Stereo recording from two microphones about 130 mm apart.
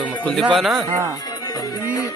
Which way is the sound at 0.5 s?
Centre (ahead or behind).